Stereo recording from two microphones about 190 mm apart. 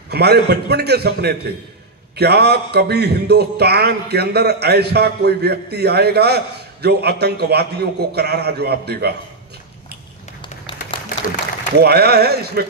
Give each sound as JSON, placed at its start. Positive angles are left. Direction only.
{"t": 0.1, "sound": "a man's voice", "side_deg": -60}
{"t": 11.7, "sound": "a man's voice", "side_deg": -55}